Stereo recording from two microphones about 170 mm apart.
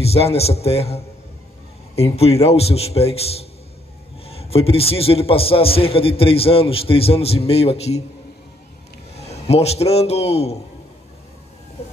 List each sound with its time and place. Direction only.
0.0 s a man's voice: 35° left (ahead or behind)
9.1 s a man's voice: 40° left (ahead or behind)